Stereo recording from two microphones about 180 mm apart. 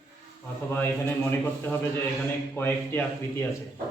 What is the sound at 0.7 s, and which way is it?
A man's voice, 10° left (ahead or behind).